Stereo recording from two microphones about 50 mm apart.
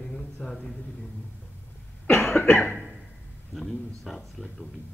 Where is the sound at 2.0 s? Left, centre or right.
Left.